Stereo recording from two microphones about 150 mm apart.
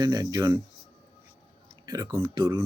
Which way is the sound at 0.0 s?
25° right (ahead or behind).